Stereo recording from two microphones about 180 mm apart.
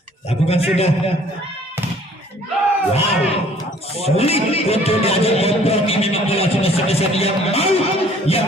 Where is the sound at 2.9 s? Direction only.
35° left (ahead or behind).